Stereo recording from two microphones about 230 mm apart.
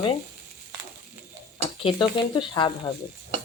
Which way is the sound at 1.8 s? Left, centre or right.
Left.